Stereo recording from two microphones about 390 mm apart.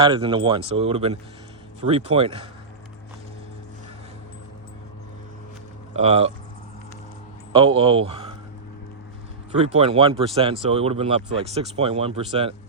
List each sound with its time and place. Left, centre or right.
0.0 s speech: centre
5.9 s speech: centre
7.5 s speech: centre
9.5 s speech: centre